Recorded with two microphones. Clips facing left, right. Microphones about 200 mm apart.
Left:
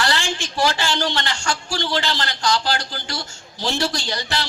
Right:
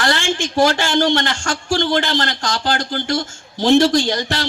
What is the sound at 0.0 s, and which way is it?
A man's voice, 50° right (ahead or behind).